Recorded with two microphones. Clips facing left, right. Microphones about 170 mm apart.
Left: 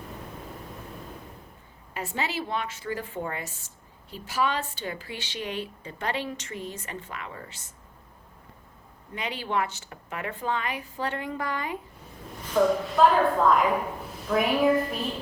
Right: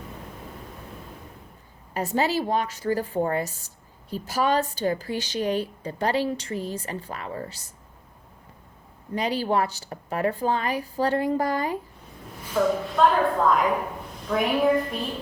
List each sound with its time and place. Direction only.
1.9 s a woman's voice: 40° right (ahead or behind)
9.1 s a woman's voice: 35° right (ahead or behind)
12.5 s a woman's voice: centre (ahead or behind)